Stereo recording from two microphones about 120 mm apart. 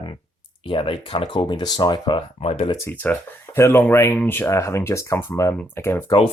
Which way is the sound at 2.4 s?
55° left (ahead or behind).